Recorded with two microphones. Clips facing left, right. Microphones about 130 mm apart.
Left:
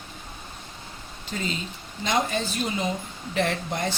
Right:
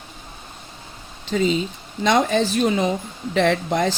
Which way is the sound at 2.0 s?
90° right.